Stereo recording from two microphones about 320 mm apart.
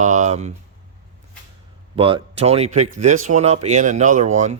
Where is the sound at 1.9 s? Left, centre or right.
Centre.